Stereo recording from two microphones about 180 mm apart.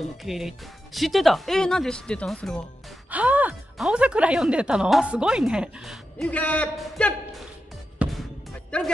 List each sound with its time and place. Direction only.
0.2 s speech: centre (ahead or behind)
3.1 s speech: 10° right (ahead or behind)
8.0 s music: 5° right (ahead or behind)
8.7 s speech: 5° left (ahead or behind)